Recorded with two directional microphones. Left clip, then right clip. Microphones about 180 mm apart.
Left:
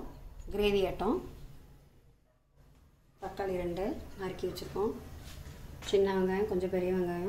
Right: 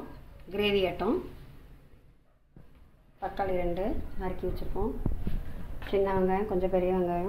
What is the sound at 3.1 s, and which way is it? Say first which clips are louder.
A woman's voice: right 5 dB; 10° left (ahead or behind).